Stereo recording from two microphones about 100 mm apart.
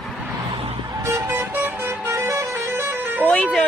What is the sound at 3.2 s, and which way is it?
Music, 10° left (ahead or behind).